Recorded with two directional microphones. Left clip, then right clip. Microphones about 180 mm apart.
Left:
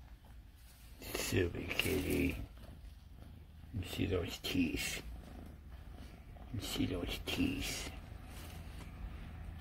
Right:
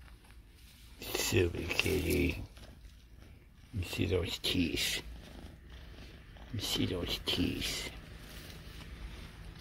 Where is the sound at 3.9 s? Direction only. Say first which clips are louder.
Right 4 dB; 30° right (ahead or behind).